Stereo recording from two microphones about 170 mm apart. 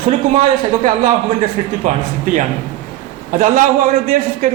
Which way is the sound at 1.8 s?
50° right (ahead or behind).